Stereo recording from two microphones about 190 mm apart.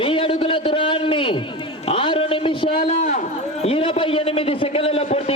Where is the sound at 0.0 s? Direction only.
25° left (ahead or behind).